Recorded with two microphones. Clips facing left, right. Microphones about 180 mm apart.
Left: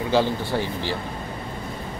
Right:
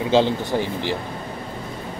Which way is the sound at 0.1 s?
20° right (ahead or behind).